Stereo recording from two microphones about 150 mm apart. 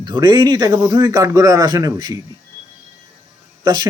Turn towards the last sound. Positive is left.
turn(degrees=-25)  # may be behind; listen again after turning